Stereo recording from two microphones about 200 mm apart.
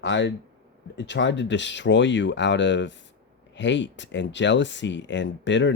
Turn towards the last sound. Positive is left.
turn(degrees=65)  # may be behind; listen again after turning